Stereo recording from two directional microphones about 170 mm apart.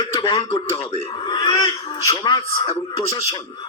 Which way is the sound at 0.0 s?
25° left (ahead or behind).